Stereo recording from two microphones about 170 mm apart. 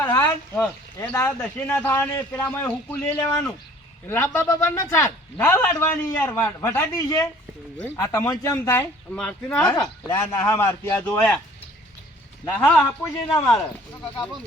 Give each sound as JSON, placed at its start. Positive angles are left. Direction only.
{"t": 0.0, "sound": "a sound", "side_deg": 10}
{"t": 0.9, "sound": "a man's voice", "side_deg": 15}
{"t": 12.5, "sound": "a man's voice", "side_deg": 10}